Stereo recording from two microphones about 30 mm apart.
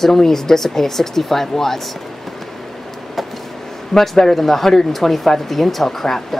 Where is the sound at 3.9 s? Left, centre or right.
Centre.